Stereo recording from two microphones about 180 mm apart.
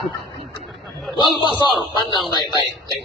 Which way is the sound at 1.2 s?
25° left (ahead or behind).